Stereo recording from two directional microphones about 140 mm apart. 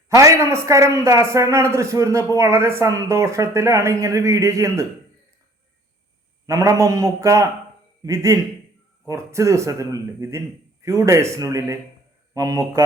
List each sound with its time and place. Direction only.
0.1 s a man's voice: 20° right (ahead or behind)
6.4 s a man's voice: 25° right (ahead or behind)